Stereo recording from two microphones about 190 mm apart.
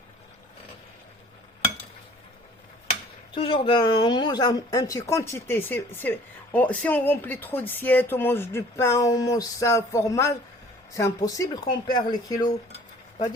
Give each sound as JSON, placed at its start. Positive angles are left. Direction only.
{"t": 3.3, "sound": "speech", "side_deg": 30}